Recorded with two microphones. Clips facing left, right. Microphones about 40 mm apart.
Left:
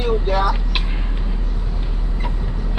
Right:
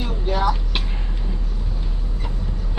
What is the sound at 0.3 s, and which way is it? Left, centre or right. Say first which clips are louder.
Vehicle: left 2 dB; centre.